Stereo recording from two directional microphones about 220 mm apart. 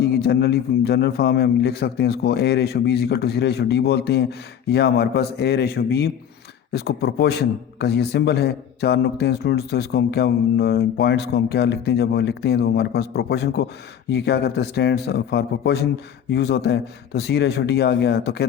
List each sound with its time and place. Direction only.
0.0 s a man's voice: 45° left (ahead or behind)